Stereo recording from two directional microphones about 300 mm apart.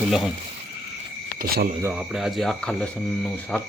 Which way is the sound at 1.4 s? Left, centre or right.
Right.